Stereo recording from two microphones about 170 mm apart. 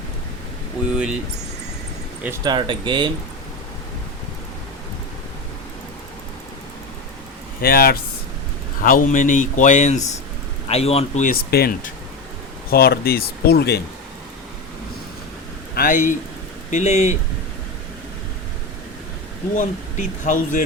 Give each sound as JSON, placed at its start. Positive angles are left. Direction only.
{"t": 0.9, "sound": "speech", "side_deg": -5}
{"t": 2.4, "sound": "speech", "side_deg": -25}
{"t": 7.6, "sound": "speech", "side_deg": 60}
{"t": 11.5, "sound": "speech", "side_deg": 60}
{"t": 15.7, "sound": "speech", "side_deg": 55}
{"t": 19.5, "sound": "speech", "side_deg": 50}